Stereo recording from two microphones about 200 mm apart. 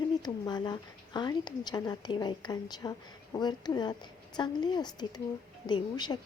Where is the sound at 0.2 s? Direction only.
20° left (ahead or behind).